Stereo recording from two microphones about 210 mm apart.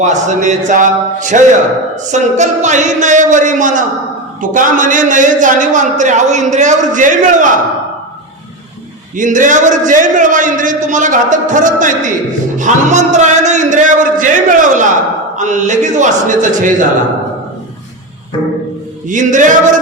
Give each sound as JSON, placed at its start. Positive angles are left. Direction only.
{"t": 0.0, "sound": "a man's voice", "side_deg": -35}
{"t": 9.1, "sound": "a man's voice", "side_deg": -40}
{"t": 12.5, "sound": "music", "side_deg": -35}
{"t": 15.4, "sound": "a man's voice", "side_deg": -35}
{"t": 19.0, "sound": "a man's voice", "side_deg": -35}